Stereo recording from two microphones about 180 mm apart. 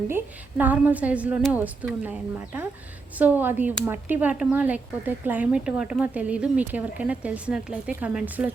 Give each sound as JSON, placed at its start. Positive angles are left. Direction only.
{"t": 0.1, "sound": "speech", "side_deg": -10}